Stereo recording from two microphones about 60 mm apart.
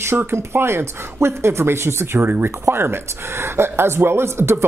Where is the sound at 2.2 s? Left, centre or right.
Right.